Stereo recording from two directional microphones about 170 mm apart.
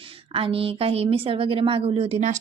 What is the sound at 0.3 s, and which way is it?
A woman's voice, 35° right (ahead or behind).